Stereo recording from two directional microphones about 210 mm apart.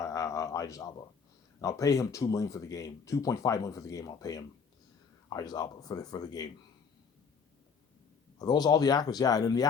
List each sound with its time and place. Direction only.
0.0 s a sound: 15° left (ahead or behind)
1.6 s speech: 15° left (ahead or behind)
8.4 s speech: 20° left (ahead or behind)